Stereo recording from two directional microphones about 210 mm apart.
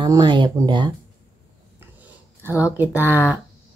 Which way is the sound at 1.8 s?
10° right (ahead or behind).